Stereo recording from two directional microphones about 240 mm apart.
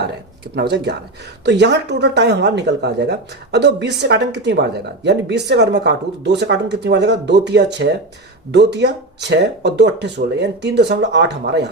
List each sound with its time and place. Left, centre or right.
0.5 s speech: right